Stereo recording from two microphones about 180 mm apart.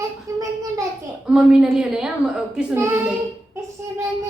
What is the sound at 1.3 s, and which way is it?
A woman's voice, 5° right (ahead or behind).